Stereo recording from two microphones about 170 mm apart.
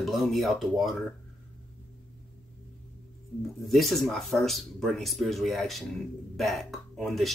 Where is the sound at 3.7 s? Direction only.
Centre (ahead or behind).